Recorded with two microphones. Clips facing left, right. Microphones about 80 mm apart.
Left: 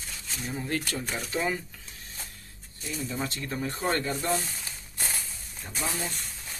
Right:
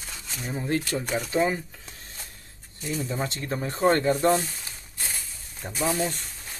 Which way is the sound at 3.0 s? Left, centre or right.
Right.